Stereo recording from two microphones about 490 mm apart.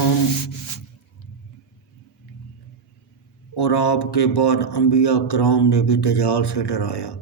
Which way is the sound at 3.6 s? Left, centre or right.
Left.